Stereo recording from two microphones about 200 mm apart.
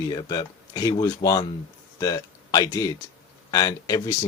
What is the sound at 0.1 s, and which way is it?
Speech, 20° left (ahead or behind).